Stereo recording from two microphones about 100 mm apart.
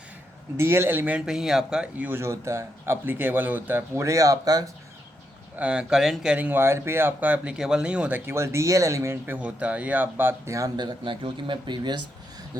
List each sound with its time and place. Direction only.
0.5 s speech: 25° right (ahead or behind)
1.2 s speech: 5° right (ahead or behind); by 4.7 s 35° right (ahead or behind)
5.5 s speech: 10° right (ahead or behind)
8.3 s speech: 30° right (ahead or behind)
10.8 s speech: 50° right (ahead or behind)